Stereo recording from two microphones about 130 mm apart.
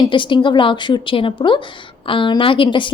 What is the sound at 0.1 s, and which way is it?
A woman's voice, 40° left (ahead or behind).